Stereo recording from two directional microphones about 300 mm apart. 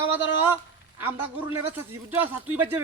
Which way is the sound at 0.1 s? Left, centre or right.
Centre.